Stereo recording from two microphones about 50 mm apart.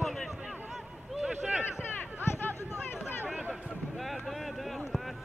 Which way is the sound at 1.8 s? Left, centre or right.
Left.